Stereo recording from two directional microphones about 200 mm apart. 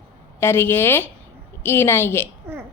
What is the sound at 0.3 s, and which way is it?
A woman's voice, 10° left (ahead or behind).